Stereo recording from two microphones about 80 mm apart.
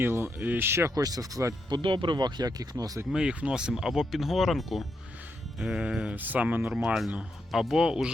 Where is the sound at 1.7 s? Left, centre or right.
Right.